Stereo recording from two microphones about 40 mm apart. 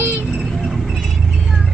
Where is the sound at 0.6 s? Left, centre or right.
Centre.